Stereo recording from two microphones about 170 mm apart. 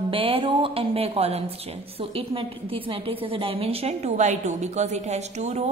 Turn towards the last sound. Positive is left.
turn(degrees=-40)  # may be behind; listen again after turning